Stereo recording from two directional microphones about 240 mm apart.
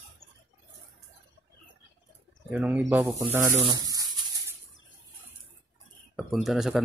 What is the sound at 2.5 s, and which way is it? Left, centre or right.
Speech, centre.